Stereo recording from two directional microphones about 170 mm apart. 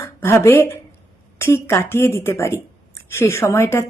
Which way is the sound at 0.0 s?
15° left (ahead or behind).